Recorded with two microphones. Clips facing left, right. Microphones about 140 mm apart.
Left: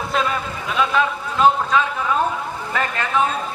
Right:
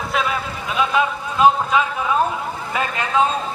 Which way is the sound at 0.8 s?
15° right (ahead or behind).